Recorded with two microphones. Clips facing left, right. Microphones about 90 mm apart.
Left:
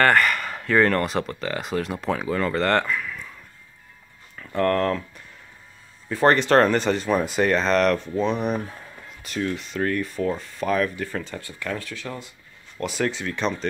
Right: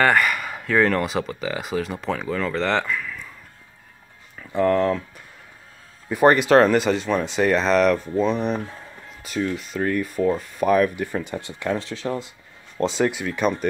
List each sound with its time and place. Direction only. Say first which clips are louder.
0.0 s speech: even; 5° right (ahead or behind)
4.4 s speech: right 2 dB; 5° right (ahead or behind); by 13.0 s 25° right (ahead or behind)
13.0 s speech: right 2 dB; 15° right (ahead or behind)